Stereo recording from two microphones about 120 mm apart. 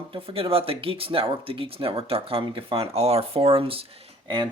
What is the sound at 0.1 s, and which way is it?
Speech, 50° right (ahead or behind).